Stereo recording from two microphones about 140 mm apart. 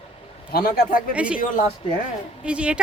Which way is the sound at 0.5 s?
90° left.